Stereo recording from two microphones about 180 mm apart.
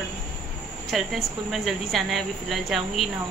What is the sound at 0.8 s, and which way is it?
Speech, centre (ahead or behind).